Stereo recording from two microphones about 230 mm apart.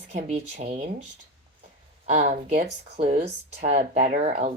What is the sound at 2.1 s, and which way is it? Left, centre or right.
Speech, right.